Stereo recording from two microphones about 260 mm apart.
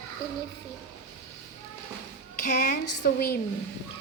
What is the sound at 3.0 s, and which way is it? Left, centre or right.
Speech, left.